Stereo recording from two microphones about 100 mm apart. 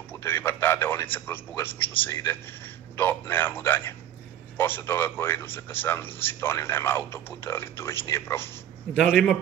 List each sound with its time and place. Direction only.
0.1 s a sound: 25° left (ahead or behind)
1.1 s a man's voice: 20° left (ahead or behind)
9.1 s a man's voice: 5° left (ahead or behind)